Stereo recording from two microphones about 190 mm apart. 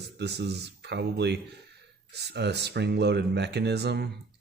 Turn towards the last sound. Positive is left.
turn(degrees=-60)  # may be behind; listen again after turning